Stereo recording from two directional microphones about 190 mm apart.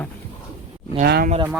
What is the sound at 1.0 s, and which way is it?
Speech, 50° right (ahead or behind).